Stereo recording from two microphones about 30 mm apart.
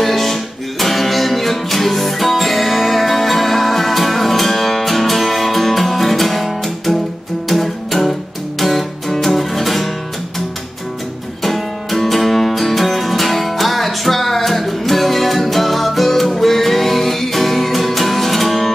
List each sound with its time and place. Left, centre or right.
0.0 s music: centre
7.4 s music: centre
11.4 s music: centre